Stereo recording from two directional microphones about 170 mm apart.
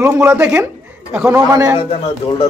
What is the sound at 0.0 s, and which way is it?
A man's voice, 15° right (ahead or behind).